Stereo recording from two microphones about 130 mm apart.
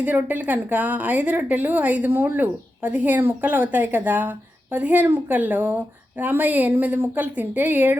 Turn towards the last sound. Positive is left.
turn(degrees=-15)  # may be behind; listen again after turning